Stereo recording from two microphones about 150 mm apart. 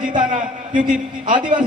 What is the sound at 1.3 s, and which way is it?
Speech, 60° right (ahead or behind).